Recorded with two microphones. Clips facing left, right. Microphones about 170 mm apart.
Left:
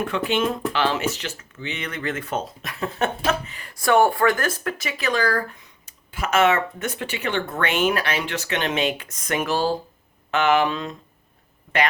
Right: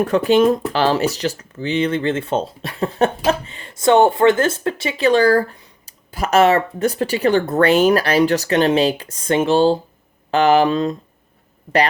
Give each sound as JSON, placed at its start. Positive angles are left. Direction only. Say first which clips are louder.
{"t": 0.0, "sound": "speech", "louder": "right 9 dB", "side_deg": -40}